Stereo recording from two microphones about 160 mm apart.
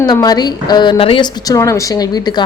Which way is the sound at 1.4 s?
20° left (ahead or behind).